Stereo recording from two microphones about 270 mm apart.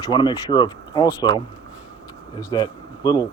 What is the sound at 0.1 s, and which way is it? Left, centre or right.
Speech, centre.